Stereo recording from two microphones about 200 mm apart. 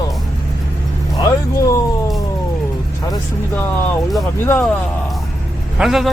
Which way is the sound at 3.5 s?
5° left (ahead or behind).